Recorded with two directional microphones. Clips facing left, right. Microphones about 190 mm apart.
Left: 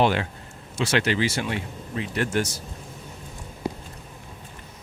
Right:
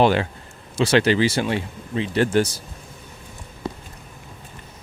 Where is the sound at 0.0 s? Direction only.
35° right (ahead or behind).